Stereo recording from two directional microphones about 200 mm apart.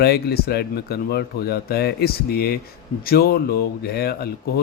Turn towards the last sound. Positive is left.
turn(degrees=50)  # may be behind; listen again after turning